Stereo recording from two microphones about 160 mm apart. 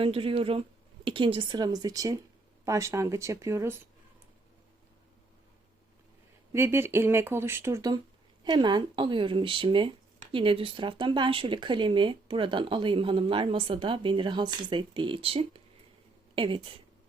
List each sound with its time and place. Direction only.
0.0 s speech: 35° right (ahead or behind); by 3.8 s 15° right (ahead or behind)
6.5 s a woman's voice: 15° right (ahead or behind); by 16.7 s 30° right (ahead or behind)